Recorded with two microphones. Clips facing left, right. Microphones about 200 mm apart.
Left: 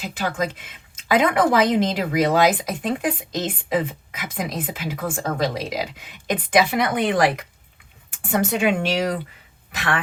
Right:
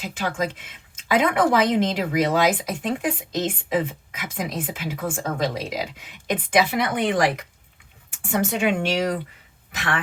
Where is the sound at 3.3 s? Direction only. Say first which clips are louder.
Right 2 dB; 35° left (ahead or behind).